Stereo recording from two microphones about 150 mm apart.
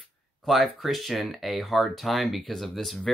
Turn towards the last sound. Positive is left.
turn(degrees=0)  # may be behind; listen again after turning